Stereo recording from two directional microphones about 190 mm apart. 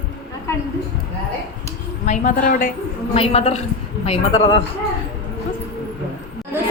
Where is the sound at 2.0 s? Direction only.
45° left (ahead or behind).